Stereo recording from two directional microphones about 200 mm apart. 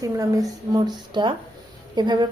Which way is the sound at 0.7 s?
20° right (ahead or behind).